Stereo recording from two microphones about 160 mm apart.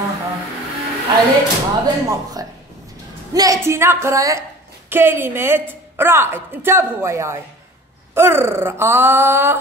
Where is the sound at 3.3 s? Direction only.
20° right (ahead or behind).